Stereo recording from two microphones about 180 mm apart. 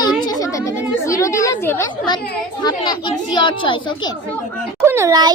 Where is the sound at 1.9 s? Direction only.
25° left (ahead or behind).